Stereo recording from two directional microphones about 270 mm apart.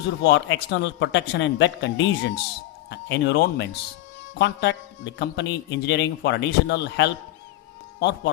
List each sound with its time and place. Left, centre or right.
0.2 s speech: left